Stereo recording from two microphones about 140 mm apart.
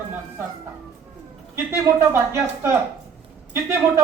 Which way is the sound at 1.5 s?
20° right (ahead or behind).